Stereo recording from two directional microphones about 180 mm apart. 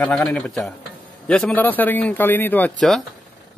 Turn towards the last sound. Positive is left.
turn(degrees=5)  # may be behind; listen again after turning